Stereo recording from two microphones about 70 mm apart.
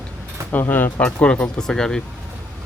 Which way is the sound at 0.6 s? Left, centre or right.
Left.